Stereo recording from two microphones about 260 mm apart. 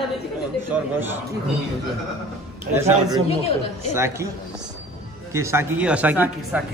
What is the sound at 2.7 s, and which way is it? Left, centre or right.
Speech, centre.